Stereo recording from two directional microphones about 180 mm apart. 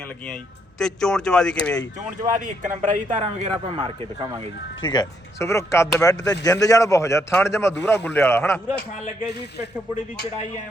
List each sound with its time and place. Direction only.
0.8 s speech: 5° left (ahead or behind)
2.8 s a man's voice: 45° right (ahead or behind)
4.8 s speech: 25° left (ahead or behind)